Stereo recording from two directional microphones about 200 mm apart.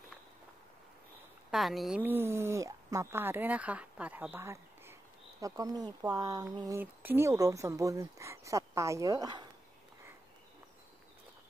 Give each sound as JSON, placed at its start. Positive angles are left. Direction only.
{"t": 1.5, "sound": "speech", "side_deg": 0}